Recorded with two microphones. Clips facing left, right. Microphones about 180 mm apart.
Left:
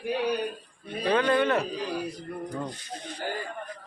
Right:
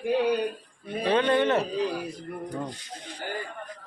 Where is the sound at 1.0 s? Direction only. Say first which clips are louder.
Right 1 dB; 25° right (ahead or behind).